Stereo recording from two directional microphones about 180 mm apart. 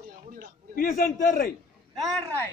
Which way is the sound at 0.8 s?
50° left (ahead or behind).